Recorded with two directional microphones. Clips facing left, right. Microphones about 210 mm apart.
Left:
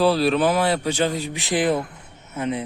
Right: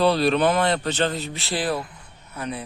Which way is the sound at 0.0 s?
5° left (ahead or behind).